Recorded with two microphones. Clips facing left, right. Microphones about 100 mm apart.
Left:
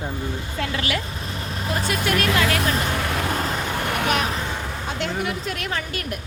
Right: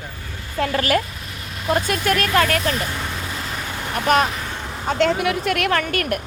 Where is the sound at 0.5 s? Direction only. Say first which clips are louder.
Right 8 dB; 45° right (ahead or behind).